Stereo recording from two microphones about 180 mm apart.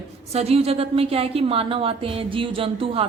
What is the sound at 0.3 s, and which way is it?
A woman's voice, 35° right (ahead or behind).